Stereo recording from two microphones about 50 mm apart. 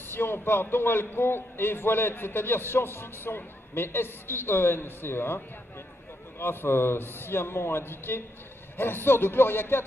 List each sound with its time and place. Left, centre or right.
0.0 s a man's voice: left